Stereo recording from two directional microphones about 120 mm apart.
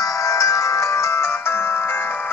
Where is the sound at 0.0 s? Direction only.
30° left (ahead or behind).